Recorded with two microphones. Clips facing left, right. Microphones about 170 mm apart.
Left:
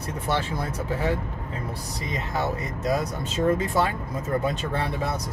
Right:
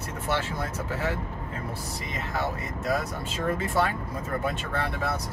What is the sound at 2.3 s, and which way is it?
Speech, 20° left (ahead or behind).